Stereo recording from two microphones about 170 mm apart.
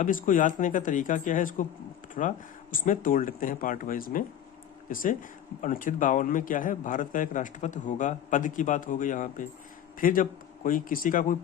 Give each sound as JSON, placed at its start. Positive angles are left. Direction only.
{"t": 0.0, "sound": "a man's voice", "side_deg": 50}